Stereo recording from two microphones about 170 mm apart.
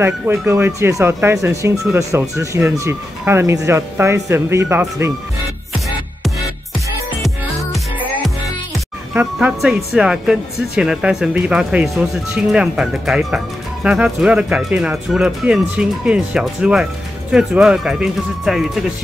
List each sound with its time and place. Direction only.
0.0 s speech: 15° right (ahead or behind)
7.2 s music: centre (ahead or behind)
9.1 s speech: 5° right (ahead or behind)